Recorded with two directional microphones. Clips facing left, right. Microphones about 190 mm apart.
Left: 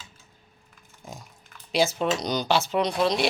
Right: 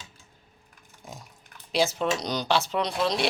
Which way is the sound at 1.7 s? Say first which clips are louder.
Left 1 dB; centre (ahead or behind).